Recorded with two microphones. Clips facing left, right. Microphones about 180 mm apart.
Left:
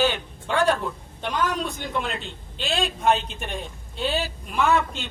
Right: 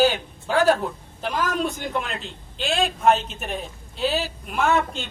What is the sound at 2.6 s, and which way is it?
A man's voice, centre (ahead or behind).